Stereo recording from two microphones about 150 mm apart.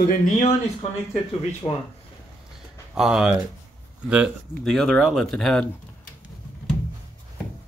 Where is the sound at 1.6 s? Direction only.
25° left (ahead or behind).